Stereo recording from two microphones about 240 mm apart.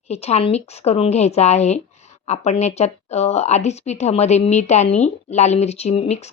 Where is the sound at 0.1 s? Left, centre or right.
Left.